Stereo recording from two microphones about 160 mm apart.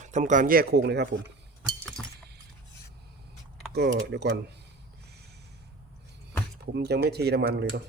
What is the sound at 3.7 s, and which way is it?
Speech, 90° right.